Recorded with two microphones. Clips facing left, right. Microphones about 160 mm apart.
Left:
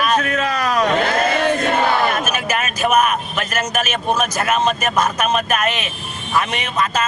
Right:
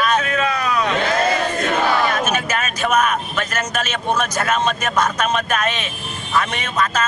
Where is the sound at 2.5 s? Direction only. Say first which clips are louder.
Left 2 dB; 10° left (ahead or behind).